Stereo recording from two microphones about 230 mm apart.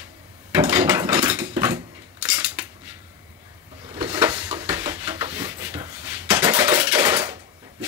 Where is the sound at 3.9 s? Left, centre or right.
Centre.